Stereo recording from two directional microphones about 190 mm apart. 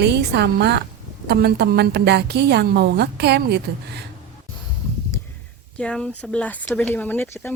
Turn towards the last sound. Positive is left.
turn(degrees=10)  # may be behind; listen again after turning